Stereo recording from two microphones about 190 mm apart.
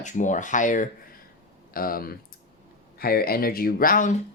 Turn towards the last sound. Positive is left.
turn(degrees=45)  # may be behind; listen again after turning